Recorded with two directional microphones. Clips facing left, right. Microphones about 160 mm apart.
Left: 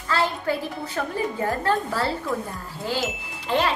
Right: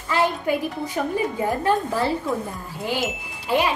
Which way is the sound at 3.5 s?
10° right (ahead or behind).